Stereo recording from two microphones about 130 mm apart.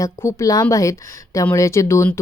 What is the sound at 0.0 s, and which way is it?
A woman's voice, 20° left (ahead or behind).